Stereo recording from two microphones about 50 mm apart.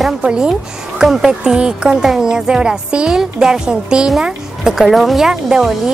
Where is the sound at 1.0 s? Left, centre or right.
Centre.